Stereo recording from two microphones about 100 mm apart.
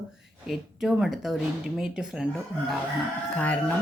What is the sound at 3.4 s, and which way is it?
Speech, 15° left (ahead or behind).